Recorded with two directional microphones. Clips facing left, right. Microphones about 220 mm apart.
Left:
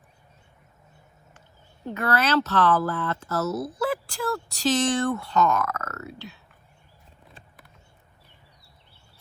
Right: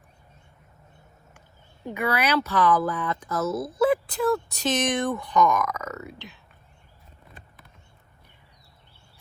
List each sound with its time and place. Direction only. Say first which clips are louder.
1.9 s speech: left 1 dB; 10° right (ahead or behind)